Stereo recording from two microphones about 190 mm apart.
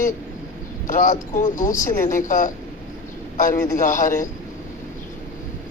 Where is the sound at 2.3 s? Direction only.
40° left (ahead or behind).